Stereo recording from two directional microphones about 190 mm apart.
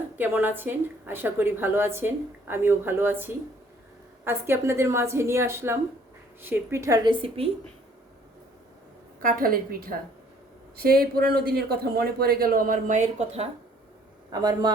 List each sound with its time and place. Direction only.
0.2 s a woman's voice: 10° right (ahead or behind); by 7.4 s 25° right (ahead or behind)
9.2 s speech: 50° right (ahead or behind)
14.3 s a man's voice: 20° right (ahead or behind)